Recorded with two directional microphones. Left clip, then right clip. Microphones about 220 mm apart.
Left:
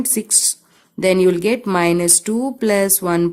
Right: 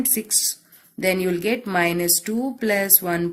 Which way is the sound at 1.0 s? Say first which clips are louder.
Left 7 dB; 55° left (ahead or behind).